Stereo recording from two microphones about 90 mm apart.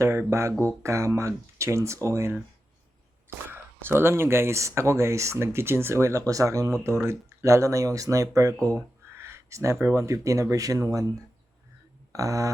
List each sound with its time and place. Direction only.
0.0 s speech: 35° right (ahead or behind)